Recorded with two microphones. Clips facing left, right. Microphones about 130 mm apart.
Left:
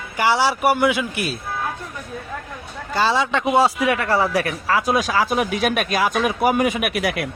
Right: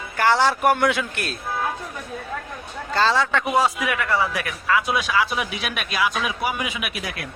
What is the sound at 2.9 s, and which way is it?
A man's voice, 15° left (ahead or behind).